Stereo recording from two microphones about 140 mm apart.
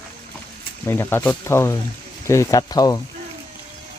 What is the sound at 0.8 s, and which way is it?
Speech, 15° left (ahead or behind).